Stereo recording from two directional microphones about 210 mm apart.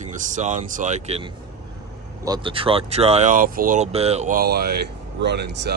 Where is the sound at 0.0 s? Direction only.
35° right (ahead or behind).